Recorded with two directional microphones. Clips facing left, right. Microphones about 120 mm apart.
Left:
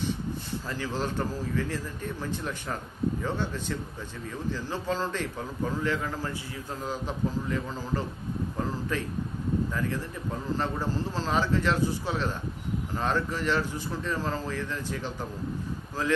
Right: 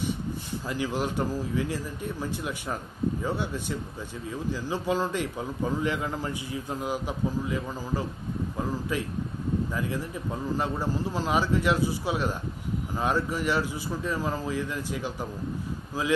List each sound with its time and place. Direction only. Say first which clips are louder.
0.7 s a man's voice: right 3 dB; 15° right (ahead or behind)